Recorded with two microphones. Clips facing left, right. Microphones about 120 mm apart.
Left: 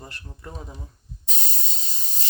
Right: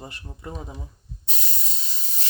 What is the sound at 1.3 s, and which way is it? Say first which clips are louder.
Hiss: even; 35° left (ahead or behind).